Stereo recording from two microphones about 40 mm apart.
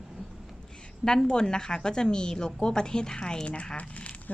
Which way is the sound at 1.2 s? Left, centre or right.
Centre.